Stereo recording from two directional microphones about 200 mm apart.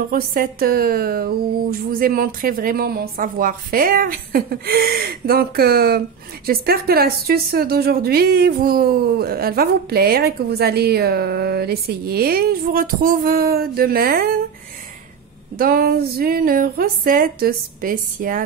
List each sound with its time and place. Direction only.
0.1 s speech: 45° right (ahead or behind)
15.5 s speech: 45° right (ahead or behind)